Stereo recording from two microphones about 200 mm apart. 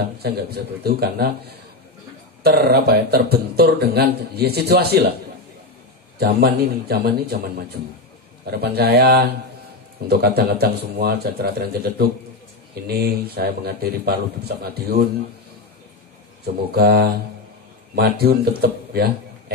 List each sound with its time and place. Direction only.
0.0 s a man's voice: 50° right (ahead or behind)
2.4 s a man's voice: 50° right (ahead or behind)
6.1 s a man's voice: 50° right (ahead or behind)
16.4 s a man's voice: 50° right (ahead or behind)